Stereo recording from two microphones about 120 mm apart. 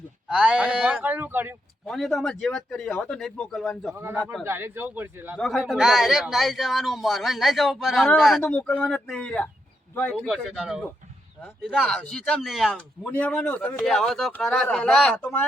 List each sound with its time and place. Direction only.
0.3 s speech: 5° right (ahead or behind)
1.9 s speech: centre (ahead or behind)
3.9 s a man's voice: 20° right (ahead or behind)
5.4 s speech: centre (ahead or behind)
10.2 s speech: centre (ahead or behind)
11.9 s speech: 5° left (ahead or behind)
13.1 s speech: 10° left (ahead or behind)
13.8 s speech: 5° left (ahead or behind)
15.1 s speech: 15° left (ahead or behind)